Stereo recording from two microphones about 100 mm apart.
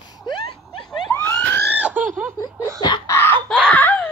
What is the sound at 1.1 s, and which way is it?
Emergency vehicle, 20° left (ahead or behind).